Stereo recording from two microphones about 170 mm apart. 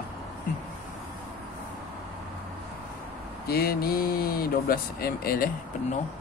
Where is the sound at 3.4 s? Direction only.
65° left (ahead or behind).